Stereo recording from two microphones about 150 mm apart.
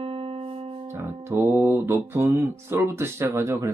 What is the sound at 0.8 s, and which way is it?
Music, 15° right (ahead or behind).